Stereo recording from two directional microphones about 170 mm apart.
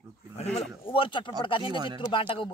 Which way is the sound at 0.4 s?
35° left (ahead or behind).